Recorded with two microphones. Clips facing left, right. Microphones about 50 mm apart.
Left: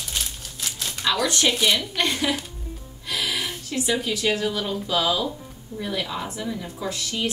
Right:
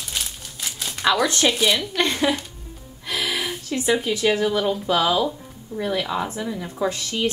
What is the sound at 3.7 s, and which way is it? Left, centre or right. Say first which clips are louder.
Speech: right 4 dB; right.